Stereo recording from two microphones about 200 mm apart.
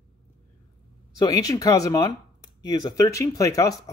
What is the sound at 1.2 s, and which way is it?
Speech, 20° left (ahead or behind).